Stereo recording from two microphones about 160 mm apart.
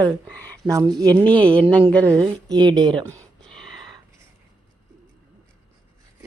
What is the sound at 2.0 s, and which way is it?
Speech, 15° right (ahead or behind).